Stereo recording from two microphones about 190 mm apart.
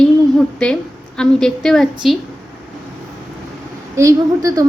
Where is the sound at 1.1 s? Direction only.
5° left (ahead or behind).